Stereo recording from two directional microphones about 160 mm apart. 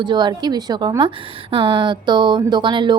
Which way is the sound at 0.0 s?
25° right (ahead or behind).